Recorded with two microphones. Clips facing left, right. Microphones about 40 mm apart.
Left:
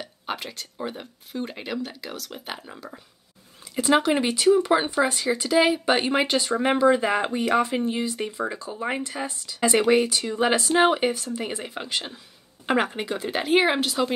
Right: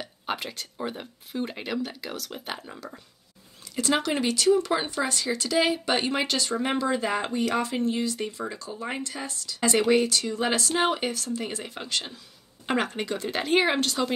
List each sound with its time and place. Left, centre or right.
0.0 s speech: centre
3.7 s speech: centre